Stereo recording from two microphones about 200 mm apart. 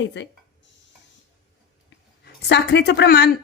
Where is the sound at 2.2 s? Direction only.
55° left (ahead or behind).